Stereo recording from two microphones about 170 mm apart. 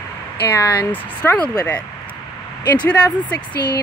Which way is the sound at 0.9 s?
10° left (ahead or behind).